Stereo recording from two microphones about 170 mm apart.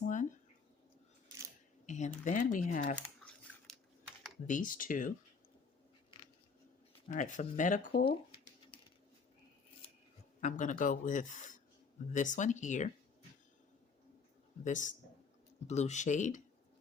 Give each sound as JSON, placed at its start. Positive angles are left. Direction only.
{"t": 0.0, "sound": "a sound", "side_deg": 45}
{"t": 1.9, "sound": "speech", "side_deg": 45}
{"t": 4.4, "sound": "speech", "side_deg": 50}
{"t": 7.1, "sound": "speech", "side_deg": 45}
{"t": 10.4, "sound": "speech", "side_deg": 50}
{"t": 14.6, "sound": "speech", "side_deg": 45}